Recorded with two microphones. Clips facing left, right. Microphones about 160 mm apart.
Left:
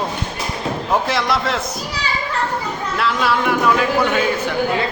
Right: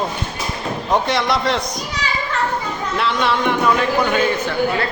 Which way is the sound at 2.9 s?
Centre (ahead or behind).